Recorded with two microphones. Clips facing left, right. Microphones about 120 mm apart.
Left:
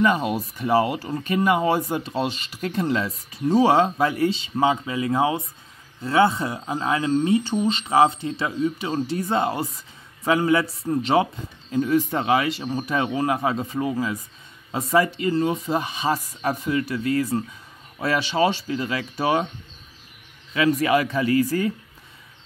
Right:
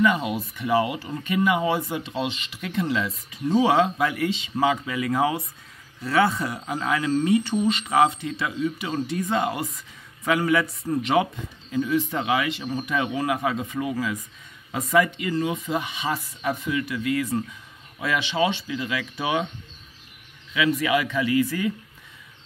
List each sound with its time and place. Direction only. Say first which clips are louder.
0.0 s speech: left 1 dB; 40° left (ahead or behind)
11.7 s speech: left 3 dB; 40° left (ahead or behind)
20.5 s speech: left 3 dB; 40° left (ahead or behind)